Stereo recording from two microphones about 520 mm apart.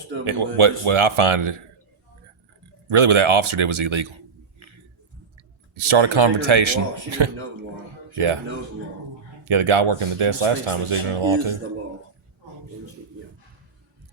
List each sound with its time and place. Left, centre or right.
0.3 s speech: right
2.9 s a man's voice: right
5.7 s a man's voice: right
9.4 s speech: right